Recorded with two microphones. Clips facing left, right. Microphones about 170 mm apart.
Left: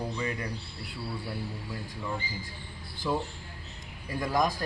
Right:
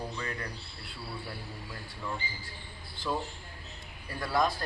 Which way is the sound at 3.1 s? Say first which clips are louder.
Left 3 dB; 10° left (ahead or behind).